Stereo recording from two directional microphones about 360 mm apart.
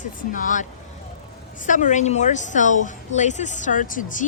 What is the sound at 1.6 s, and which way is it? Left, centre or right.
A woman's voice, left.